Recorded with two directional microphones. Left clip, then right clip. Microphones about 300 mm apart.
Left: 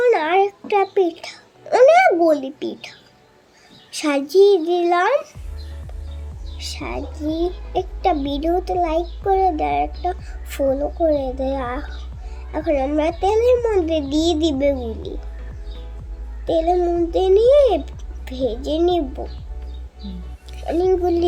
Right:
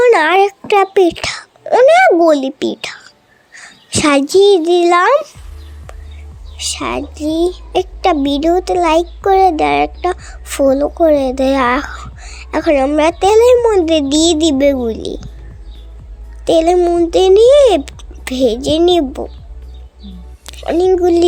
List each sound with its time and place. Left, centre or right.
0.0 s a child's voice: right
6.6 s speech: right
16.5 s speech: right
20.5 s speech: right